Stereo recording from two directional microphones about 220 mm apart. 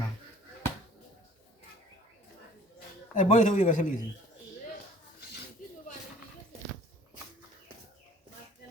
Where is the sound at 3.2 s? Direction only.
30° left (ahead or behind).